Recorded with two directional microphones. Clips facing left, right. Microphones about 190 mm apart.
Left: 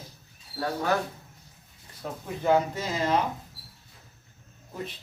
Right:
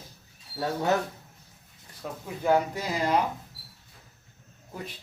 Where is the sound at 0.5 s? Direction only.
20° right (ahead or behind).